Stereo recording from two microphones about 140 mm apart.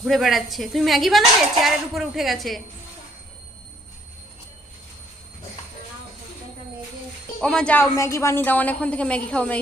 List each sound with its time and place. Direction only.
0.0 s a woman's voice: centre (ahead or behind)
7.4 s a woman's voice: 5° left (ahead or behind)
7.9 s a woman's voice: 20° left (ahead or behind)